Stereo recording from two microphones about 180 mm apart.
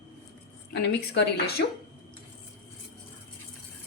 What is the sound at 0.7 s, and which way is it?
Speech, 65° left (ahead or behind).